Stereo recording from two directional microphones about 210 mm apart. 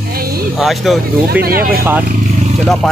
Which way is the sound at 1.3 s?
45° right (ahead or behind).